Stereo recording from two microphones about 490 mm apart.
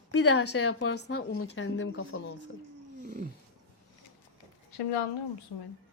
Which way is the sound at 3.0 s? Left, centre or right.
Centre.